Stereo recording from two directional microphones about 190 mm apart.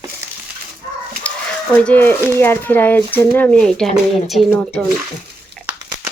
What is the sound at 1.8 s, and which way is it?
Speech, 10° left (ahead or behind).